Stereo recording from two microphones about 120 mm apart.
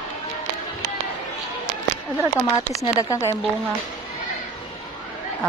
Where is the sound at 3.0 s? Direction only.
25° left (ahead or behind).